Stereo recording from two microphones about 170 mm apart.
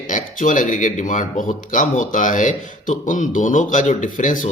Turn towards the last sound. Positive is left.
turn(degrees=50)  # may be behind; listen again after turning